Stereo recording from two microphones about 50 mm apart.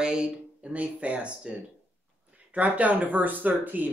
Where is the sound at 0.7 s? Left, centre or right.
Right.